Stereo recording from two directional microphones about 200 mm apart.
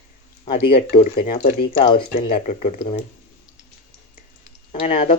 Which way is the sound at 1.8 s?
25° left (ahead or behind).